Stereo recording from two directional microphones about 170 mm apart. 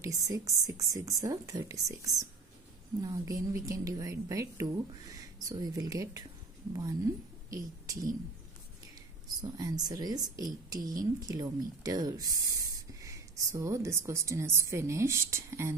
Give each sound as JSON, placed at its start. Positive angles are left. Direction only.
{"t": 0.0, "sound": "a woman's voice", "side_deg": -20}
{"t": 7.5, "sound": "speech", "side_deg": -20}
{"t": 9.4, "sound": "a woman's voice", "side_deg": -20}